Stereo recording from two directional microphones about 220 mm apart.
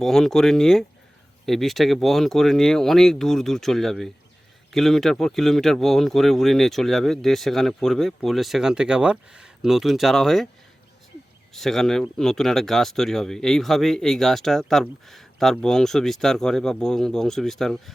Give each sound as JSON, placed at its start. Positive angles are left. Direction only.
{"t": 0.0, "sound": "speech", "side_deg": 0}
{"t": 11.5, "sound": "speech", "side_deg": 0}